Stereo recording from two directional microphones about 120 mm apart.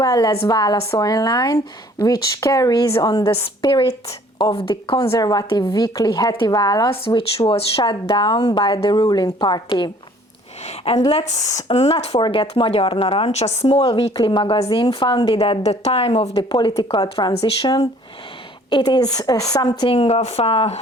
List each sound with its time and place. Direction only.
0.0 s speech: 30° left (ahead or behind)
7.1 s speech: 45° left (ahead or behind)
10.6 s a sound: 60° left (ahead or behind)
11.1 s speech: 65° left (ahead or behind)
11.7 s speech: 50° left (ahead or behind)
12.2 s speech: 45° left (ahead or behind)
14.2 s speech: 40° left (ahead or behind)
15.0 s speech: 40° left (ahead or behind)
15.4 s speech: 60° left (ahead or behind); by 17.3 s 40° left (ahead or behind)
17.3 s speech: 50° left (ahead or behind)
18.9 s speech: 30° left (ahead or behind)
19.9 s speech: 55° left (ahead or behind)